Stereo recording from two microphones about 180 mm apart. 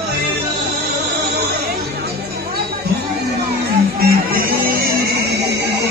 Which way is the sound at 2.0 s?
60° right (ahead or behind).